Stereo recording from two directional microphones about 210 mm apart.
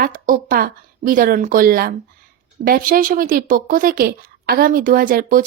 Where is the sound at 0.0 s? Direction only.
45° right (ahead or behind).